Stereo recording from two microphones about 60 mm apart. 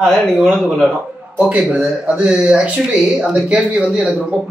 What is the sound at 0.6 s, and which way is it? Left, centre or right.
Speech, centre.